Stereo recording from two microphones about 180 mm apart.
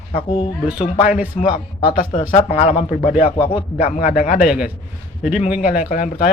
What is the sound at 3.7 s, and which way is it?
Speech, 45° left (ahead or behind).